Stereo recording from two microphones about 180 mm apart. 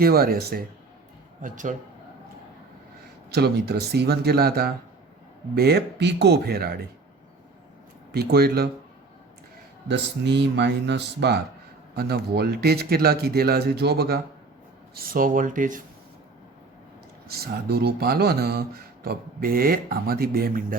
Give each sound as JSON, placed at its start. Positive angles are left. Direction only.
{"t": 0.0, "sound": "speech", "side_deg": -55}
{"t": 1.4, "sound": "speech", "side_deg": -45}
{"t": 3.2, "sound": "speech", "side_deg": -65}
{"t": 8.1, "sound": "speech", "side_deg": -60}
{"t": 9.9, "sound": "speech", "side_deg": -70}
{"t": 14.9, "sound": "speech", "side_deg": -50}
{"t": 17.2, "sound": "speech", "side_deg": -60}